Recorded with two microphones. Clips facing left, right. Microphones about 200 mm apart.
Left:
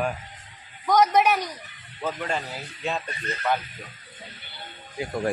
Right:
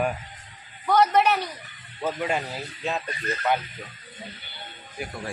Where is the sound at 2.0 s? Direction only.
10° right (ahead or behind).